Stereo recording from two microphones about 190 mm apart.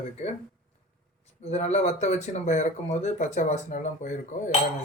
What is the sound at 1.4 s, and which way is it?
Speech, 35° left (ahead or behind).